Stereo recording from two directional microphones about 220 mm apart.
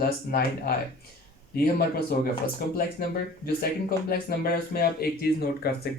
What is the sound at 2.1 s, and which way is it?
Speech, 45° left (ahead or behind).